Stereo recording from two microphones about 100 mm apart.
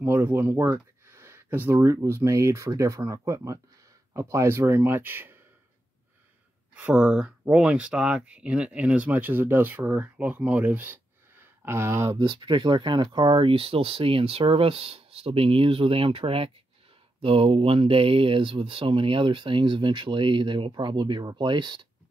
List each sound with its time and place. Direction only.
0.0 s speech: 20° right (ahead or behind)
6.7 s speech: 10° right (ahead or behind); by 12.2 s 25° right (ahead or behind)
12.2 s speech: 55° right (ahead or behind)